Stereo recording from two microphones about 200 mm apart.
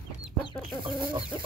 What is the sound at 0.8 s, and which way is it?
Speech, 25° right (ahead or behind).